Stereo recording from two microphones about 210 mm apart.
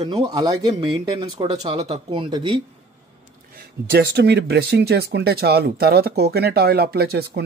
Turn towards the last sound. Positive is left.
turn(degrees=-50)  # may be behind; listen again after turning